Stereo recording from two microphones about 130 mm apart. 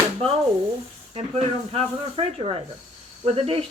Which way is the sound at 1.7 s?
50° right (ahead or behind).